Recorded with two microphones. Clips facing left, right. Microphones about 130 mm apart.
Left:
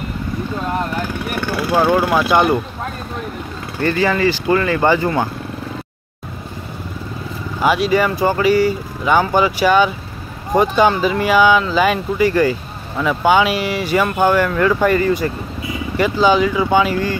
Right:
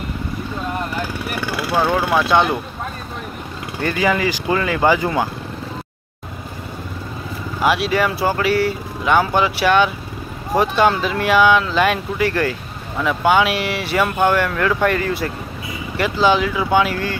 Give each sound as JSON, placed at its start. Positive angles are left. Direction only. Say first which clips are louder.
{"t": 1.3, "sound": "speech", "louder": "left 3 dB", "side_deg": 0}
{"t": 3.8, "sound": "speech", "louder": "left 3 dB", "side_deg": -10}
{"t": 7.6, "sound": "speech", "louder": "left 2 dB", "side_deg": 0}